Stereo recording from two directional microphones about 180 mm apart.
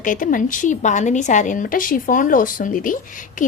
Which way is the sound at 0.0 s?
45° left (ahead or behind).